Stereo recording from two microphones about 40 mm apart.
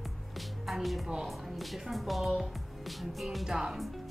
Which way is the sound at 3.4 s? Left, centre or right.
Centre.